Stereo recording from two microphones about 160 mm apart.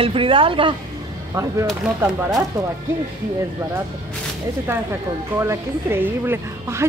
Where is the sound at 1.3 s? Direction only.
20° right (ahead or behind).